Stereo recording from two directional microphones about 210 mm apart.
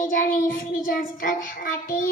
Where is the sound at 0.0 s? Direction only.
40° left (ahead or behind).